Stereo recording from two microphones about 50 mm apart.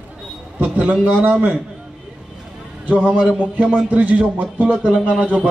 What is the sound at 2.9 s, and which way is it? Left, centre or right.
A man's voice, right.